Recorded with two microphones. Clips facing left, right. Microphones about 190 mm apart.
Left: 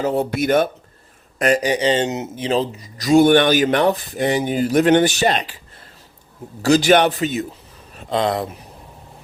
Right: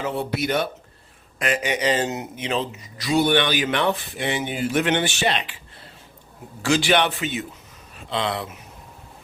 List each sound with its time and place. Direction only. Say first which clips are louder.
0.0 s speech: left 6 dB; 40° left (ahead or behind); by 2.3 s 20° left (ahead or behind)
2.3 s speech: left 6 dB; 35° left (ahead or behind)
6.6 s speech: left 6 dB; 40° left (ahead or behind)